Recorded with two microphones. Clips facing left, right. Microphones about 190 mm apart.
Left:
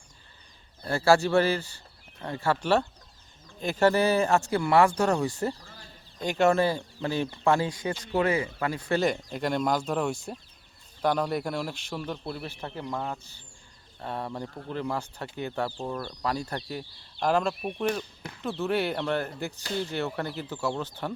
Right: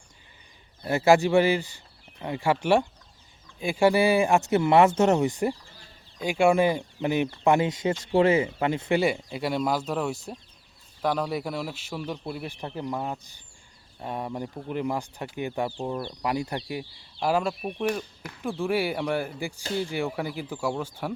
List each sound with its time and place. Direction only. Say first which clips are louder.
0.9 s speech: right 2 dB; 20° right (ahead or behind)
9.0 s speech: right 1 dB; 10° right (ahead or behind)